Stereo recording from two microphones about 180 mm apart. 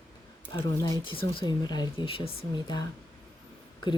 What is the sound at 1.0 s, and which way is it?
Speech, 25° left (ahead or behind).